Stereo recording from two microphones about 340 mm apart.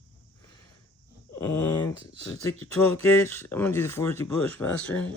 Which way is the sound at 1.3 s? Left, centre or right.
Centre.